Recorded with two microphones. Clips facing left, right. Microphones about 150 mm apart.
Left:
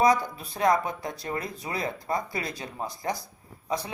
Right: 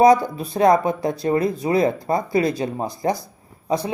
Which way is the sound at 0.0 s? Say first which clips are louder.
Right 8 dB; 30° right (ahead or behind).